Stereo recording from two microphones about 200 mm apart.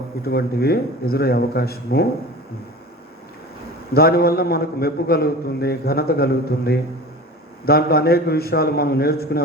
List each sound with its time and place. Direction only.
0.2 s a man's voice: 50° left (ahead or behind)
3.9 s a man's voice: 50° left (ahead or behind)